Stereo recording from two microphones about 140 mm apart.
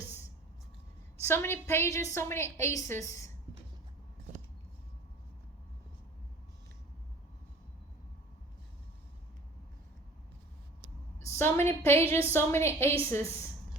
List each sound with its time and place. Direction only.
1.2 s a woman's voice: 15° left (ahead or behind)
11.3 s a woman's voice: 15° left (ahead or behind)